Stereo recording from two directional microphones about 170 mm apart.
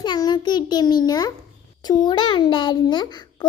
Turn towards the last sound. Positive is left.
turn(degrees=25)  # may be behind; listen again after turning